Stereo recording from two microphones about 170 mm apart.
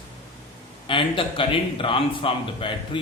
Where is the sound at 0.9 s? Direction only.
30° left (ahead or behind).